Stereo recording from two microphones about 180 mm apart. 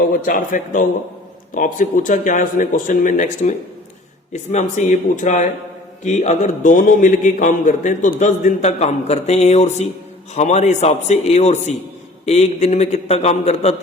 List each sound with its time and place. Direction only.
0.1 s a man's voice: 50° left (ahead or behind)